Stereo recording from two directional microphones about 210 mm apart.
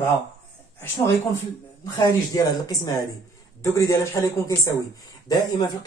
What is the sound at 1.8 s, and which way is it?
Speech, 20° left (ahead or behind).